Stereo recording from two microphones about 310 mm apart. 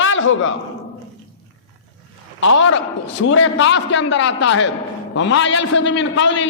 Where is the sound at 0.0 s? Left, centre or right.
Left.